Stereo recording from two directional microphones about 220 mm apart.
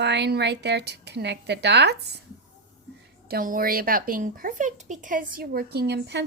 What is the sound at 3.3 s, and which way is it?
A woman's voice, 40° right (ahead or behind).